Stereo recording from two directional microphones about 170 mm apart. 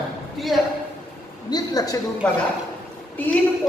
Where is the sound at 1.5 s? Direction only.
20° left (ahead or behind).